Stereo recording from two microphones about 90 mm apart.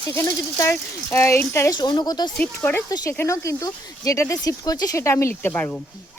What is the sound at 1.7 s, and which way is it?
Speech, 55° left (ahead or behind).